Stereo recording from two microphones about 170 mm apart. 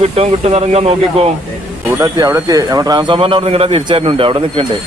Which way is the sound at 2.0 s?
20° right (ahead or behind).